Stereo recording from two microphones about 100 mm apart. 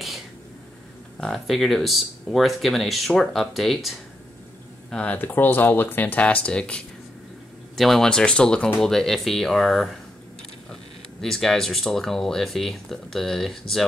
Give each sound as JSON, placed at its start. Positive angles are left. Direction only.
{"t": 1.2, "sound": "speech", "side_deg": 0}
{"t": 4.9, "sound": "speech", "side_deg": 15}